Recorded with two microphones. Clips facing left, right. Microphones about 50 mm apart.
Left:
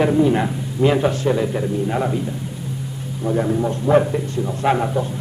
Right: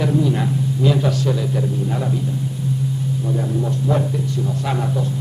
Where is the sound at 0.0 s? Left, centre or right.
Left.